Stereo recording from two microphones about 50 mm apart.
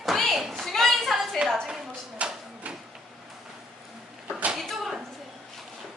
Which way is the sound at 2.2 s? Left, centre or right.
Right.